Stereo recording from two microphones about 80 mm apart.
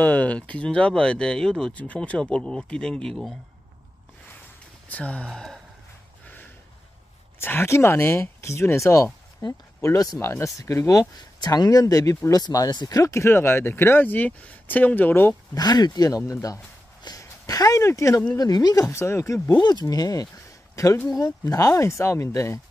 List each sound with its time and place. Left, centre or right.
0.0 s speech: centre
4.8 s speech: centre
6.2 s a sound: left
7.3 s speech: left
11.3 s speech: left
13.0 s speech: left
15.5 s speech: left
16.3 s speech: left
18.3 s speech: left
18.9 s speech: left
19.5 s speech: left